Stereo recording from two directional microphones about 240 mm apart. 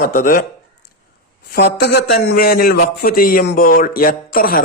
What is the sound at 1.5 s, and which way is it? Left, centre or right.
A man's voice, left.